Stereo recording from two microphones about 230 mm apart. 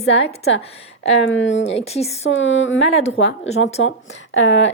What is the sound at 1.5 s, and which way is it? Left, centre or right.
Speech, left.